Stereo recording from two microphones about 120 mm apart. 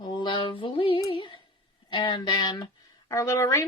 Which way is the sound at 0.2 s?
40° left (ahead or behind).